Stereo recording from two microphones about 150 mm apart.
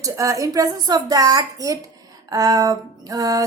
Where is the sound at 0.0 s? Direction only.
20° right (ahead or behind).